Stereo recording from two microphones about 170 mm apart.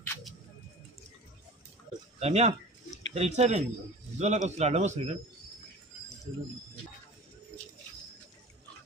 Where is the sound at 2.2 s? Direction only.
40° right (ahead or behind).